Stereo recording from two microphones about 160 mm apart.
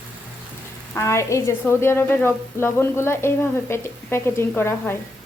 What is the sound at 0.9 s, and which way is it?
A woman's voice, 20° left (ahead or behind).